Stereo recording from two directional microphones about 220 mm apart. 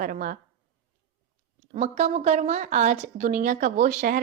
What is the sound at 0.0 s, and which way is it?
Speech, 40° right (ahead or behind).